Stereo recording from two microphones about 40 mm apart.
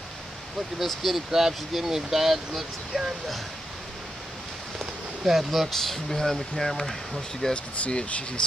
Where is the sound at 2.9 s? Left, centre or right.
Centre.